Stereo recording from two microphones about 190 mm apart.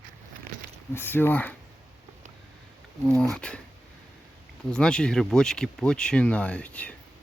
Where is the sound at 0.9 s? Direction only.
10° left (ahead or behind).